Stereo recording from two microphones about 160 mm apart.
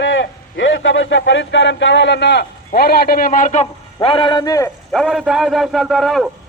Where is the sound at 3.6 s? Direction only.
35° left (ahead or behind).